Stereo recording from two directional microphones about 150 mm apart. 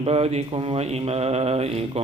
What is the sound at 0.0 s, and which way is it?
Mantra, 40° right (ahead or behind).